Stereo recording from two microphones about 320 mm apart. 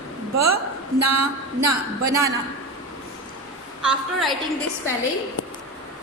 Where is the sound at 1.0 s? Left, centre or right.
Right.